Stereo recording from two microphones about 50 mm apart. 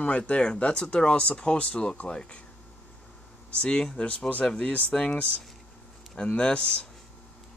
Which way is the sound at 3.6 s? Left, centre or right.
Centre.